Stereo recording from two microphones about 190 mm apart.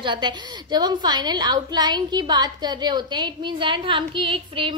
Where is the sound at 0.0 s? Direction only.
25° right (ahead or behind).